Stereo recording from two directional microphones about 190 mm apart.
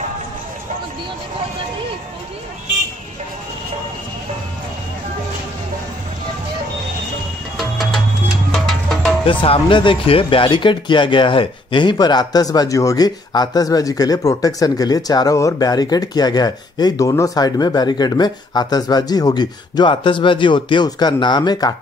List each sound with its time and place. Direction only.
7.5 s music: centre (ahead or behind)
9.2 s speech: 30° left (ahead or behind)